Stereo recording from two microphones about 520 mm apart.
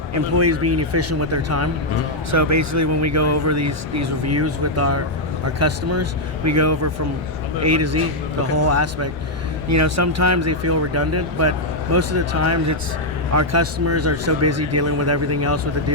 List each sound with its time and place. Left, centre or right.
0.3 s speech: right